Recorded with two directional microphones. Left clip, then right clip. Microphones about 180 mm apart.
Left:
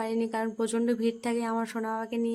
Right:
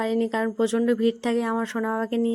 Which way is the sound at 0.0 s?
25° right (ahead or behind).